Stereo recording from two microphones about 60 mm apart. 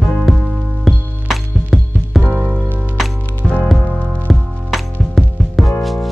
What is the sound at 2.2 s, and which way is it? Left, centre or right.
Music, right.